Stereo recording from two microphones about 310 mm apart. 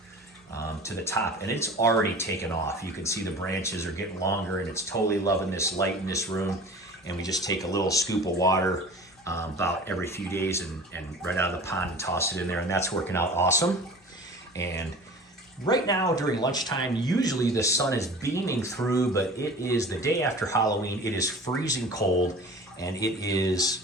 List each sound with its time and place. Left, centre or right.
0.5 s speech: centre